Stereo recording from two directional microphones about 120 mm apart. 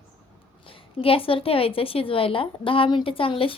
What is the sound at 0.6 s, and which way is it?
A woman's voice, 50° left (ahead or behind).